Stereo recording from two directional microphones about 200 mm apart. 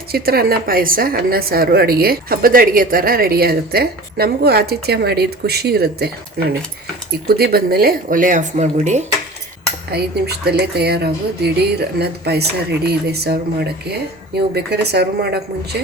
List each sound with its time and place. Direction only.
0.1 s a woman's voice: 50° right (ahead or behind)
7.3 s a woman's voice: 50° right (ahead or behind)
9.9 s speech: 55° right (ahead or behind)